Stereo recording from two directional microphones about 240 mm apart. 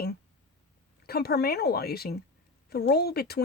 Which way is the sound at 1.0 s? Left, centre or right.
Left.